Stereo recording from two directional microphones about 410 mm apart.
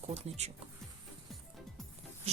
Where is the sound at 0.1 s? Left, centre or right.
Centre.